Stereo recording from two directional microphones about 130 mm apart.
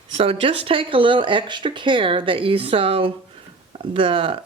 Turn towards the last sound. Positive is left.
turn(degrees=-40)  # may be behind; listen again after turning